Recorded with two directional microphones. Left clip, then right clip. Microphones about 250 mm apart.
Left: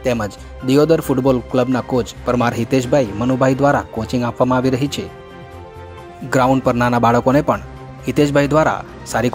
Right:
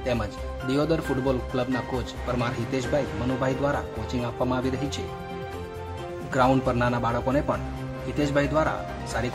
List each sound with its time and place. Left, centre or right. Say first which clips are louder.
0.0 s speech: left 8 dB; left
6.3 s speech: left 8 dB; left